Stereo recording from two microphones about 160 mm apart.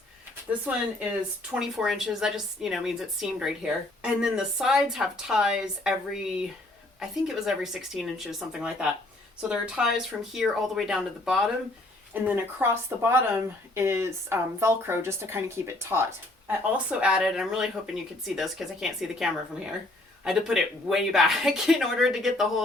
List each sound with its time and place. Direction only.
1.5 s a woman's voice: 5° right (ahead or behind)